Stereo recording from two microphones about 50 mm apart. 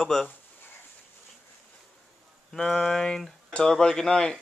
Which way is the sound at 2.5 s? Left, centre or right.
Centre.